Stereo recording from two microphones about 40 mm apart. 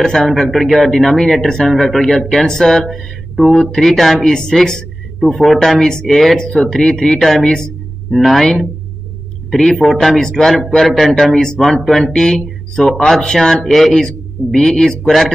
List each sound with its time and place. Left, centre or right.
0.0 s speech: centre
0.3 s speech: centre
4.3 s speech: centre
5.2 s speech: centre
8.1 s speech: centre
13.7 s speech: centre
13.9 s speech: centre